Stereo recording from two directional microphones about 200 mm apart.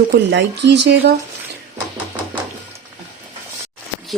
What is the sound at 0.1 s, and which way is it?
Speech, 60° right (ahead or behind).